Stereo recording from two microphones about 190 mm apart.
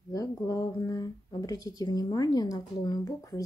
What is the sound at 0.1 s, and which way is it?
Speech, 20° left (ahead or behind).